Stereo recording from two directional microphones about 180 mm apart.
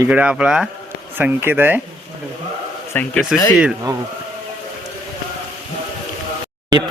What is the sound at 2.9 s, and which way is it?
Speech, 5° left (ahead or behind).